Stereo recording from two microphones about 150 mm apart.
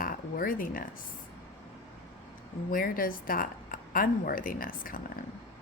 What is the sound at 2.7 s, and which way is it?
Speech, 70° left (ahead or behind).